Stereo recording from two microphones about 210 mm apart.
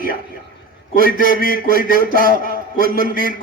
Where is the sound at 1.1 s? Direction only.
40° left (ahead or behind).